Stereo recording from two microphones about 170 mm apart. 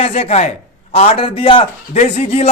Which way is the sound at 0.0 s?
40° left (ahead or behind).